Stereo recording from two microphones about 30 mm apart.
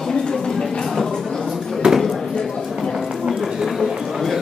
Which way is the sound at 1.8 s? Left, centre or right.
Centre.